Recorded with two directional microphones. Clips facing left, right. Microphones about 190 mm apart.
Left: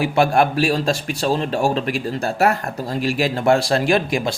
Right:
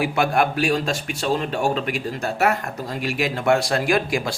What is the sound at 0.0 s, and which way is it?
A man's voice, 30° left (ahead or behind).